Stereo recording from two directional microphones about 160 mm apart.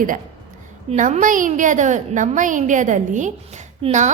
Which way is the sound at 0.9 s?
50° right (ahead or behind).